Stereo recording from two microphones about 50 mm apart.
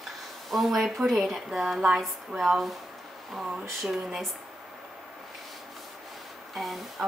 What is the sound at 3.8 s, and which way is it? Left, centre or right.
Speech, centre.